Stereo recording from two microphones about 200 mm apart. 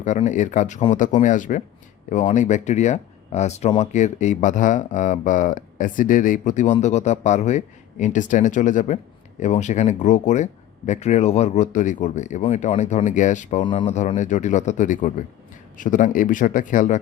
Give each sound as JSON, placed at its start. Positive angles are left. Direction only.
{"t": 0.0, "sound": "speech", "side_deg": 35}
{"t": 13.7, "sound": "speech", "side_deg": 25}
{"t": 13.9, "sound": "speech", "side_deg": 35}